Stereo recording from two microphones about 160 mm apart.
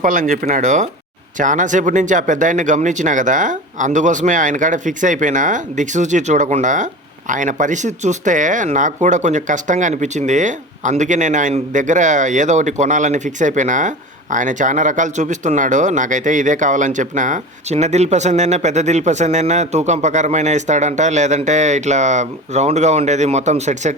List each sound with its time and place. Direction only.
0.0 s speech: 55° right (ahead or behind)